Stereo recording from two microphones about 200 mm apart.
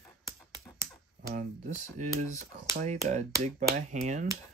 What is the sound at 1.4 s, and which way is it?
Speech, 40° right (ahead or behind).